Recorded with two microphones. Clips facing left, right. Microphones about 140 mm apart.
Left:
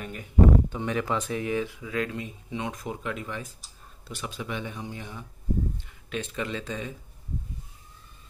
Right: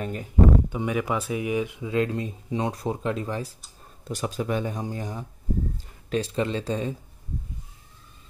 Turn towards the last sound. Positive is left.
turn(degrees=-35)  # may be behind; listen again after turning